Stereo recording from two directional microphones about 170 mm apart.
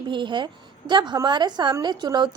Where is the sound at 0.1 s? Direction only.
30° right (ahead or behind).